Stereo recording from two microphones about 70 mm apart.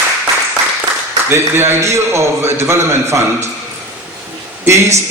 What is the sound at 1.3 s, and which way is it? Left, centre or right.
A man's voice, right.